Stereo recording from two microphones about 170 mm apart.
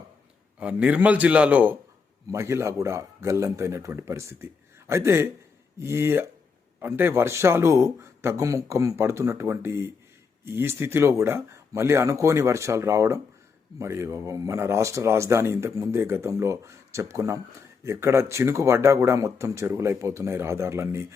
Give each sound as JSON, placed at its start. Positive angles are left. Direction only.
{"t": 0.6, "sound": "speech", "side_deg": -10}